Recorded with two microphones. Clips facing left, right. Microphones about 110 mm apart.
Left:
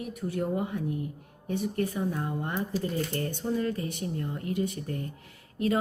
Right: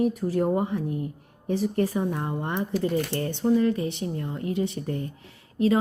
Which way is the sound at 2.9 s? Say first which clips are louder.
Right 5 dB; 75° right (ahead or behind).